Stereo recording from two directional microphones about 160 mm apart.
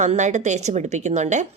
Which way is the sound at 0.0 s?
50° right (ahead or behind).